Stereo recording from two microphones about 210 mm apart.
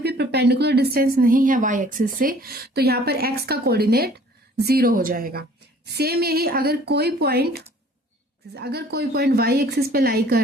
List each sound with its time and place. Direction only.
0.0 s a woman's voice: 50° right (ahead or behind)
8.5 s a woman's voice: 50° right (ahead or behind)